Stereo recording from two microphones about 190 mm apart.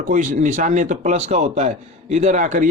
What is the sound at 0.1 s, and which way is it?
Speech, 40° right (ahead or behind).